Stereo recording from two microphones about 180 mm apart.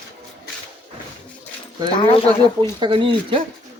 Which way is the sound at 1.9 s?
30° left (ahead or behind).